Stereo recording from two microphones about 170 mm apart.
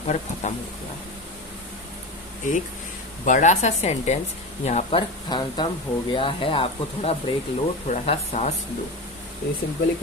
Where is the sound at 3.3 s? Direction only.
45° left (ahead or behind).